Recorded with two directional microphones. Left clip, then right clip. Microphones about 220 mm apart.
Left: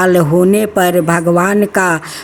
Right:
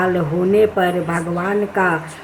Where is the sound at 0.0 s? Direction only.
50° left (ahead or behind).